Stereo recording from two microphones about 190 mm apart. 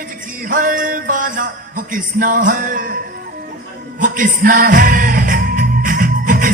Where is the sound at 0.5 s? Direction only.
45° right (ahead or behind).